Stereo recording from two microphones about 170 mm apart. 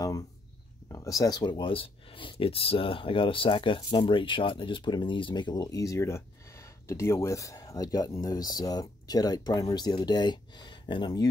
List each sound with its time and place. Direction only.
0.8 s speech: 20° left (ahead or behind)